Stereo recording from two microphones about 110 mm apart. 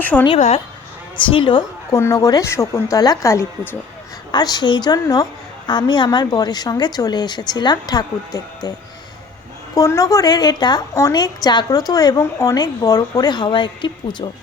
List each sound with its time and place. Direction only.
0.0 s speech: 15° left (ahead or behind)
0.3 s a woman's voice: 90° left
1.1 s a woman's voice: 50° left (ahead or behind)
1.9 s a woman's voice: 25° left (ahead or behind)
4.3 s a woman's voice: 40° left (ahead or behind)
9.7 s a woman's voice: 30° left (ahead or behind); by 14.3 s 45° left (ahead or behind)